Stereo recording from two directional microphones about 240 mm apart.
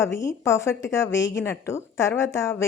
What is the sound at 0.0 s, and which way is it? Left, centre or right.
Speech, centre.